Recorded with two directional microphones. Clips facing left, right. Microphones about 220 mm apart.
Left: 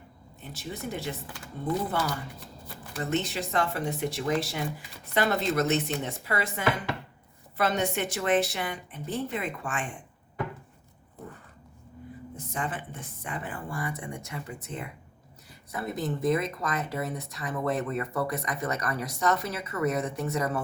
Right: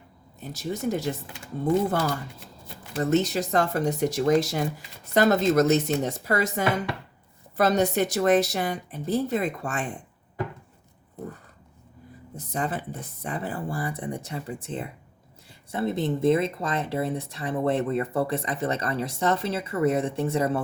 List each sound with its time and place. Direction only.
0.3 s speech: 40° right (ahead or behind)
12.4 s speech: 35° right (ahead or behind)